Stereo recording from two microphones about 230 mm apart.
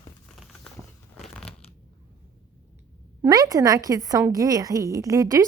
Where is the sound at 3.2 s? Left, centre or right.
Centre.